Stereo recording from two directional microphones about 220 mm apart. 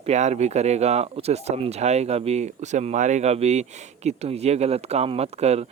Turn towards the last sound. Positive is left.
turn(degrees=-30)  # may be behind; listen again after turning